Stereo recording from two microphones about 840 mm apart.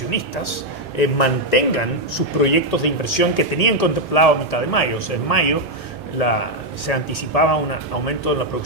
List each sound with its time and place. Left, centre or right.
0.9 s a man's voice: left